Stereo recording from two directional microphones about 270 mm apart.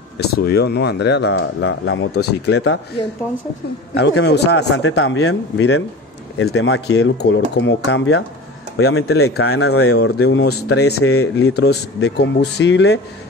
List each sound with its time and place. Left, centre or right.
0.2 s speech: left
3.9 s speech: left
9.9 s speech: left
10.9 s speech: left
11.5 s speech: left